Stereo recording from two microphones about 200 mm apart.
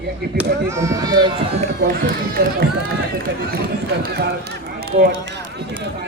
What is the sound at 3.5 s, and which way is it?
Speech, 55° right (ahead or behind).